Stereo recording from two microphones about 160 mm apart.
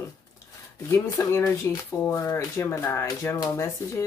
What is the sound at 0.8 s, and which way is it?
Speech, 15° left (ahead or behind).